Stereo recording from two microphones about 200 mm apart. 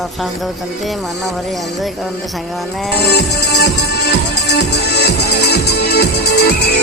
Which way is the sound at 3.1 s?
55° left (ahead or behind).